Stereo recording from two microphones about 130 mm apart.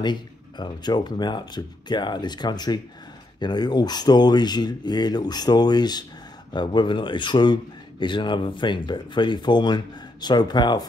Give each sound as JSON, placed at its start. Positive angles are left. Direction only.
{"t": 0.0, "sound": "speech", "side_deg": 35}